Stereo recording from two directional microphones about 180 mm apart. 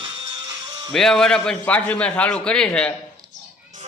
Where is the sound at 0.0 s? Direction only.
25° right (ahead or behind).